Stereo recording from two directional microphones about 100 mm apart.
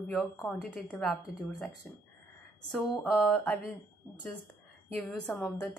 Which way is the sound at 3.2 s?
15° left (ahead or behind).